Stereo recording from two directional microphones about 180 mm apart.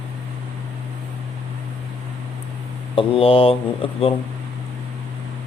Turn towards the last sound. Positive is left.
turn(degrees=30)  # may be behind; listen again after turning